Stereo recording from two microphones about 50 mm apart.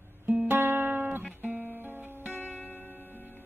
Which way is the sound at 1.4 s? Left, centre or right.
Right.